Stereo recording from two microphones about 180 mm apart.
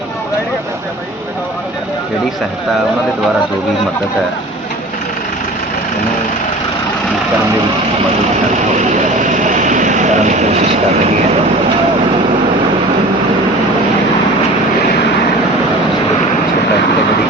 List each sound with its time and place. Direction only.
8.8 s vehicle: 45° right (ahead or behind)